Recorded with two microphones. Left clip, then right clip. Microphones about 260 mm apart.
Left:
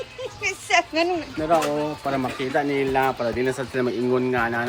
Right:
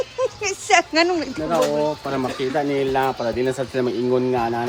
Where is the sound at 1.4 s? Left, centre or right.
Centre.